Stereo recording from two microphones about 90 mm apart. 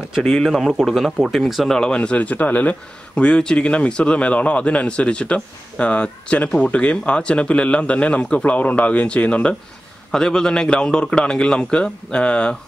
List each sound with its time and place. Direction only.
0.2 s a man's voice: centre (ahead or behind)
1.4 s a man's voice: centre (ahead or behind)